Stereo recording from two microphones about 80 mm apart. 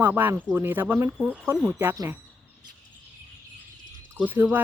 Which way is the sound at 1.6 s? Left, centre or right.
Right.